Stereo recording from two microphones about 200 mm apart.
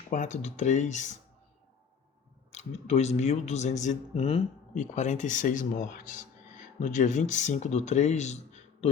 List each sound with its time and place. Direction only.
0.1 s speech: 35° left (ahead or behind)
2.5 s speech: 35° left (ahead or behind)